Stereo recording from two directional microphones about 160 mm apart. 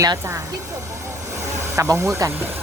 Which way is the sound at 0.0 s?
20° right (ahead or behind).